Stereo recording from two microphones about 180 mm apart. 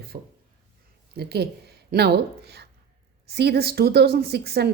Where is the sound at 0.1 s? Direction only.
50° right (ahead or behind).